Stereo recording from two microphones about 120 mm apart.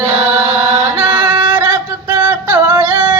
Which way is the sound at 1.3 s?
15° right (ahead or behind).